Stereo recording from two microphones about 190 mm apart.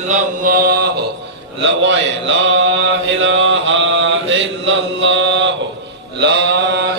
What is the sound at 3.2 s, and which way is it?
Mantra, 90° right.